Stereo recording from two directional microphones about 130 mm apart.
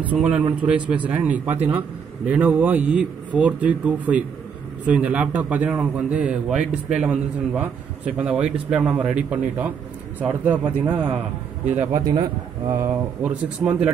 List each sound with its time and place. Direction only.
0.0 s a man's voice: 10° right (ahead or behind)
11.9 s a man's voice: 30° right (ahead or behind)
13.2 s a man's voice: 5° right (ahead or behind)